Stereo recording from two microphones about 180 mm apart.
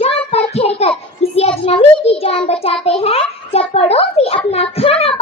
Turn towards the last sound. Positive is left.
turn(degrees=30)  # may be behind; listen again after turning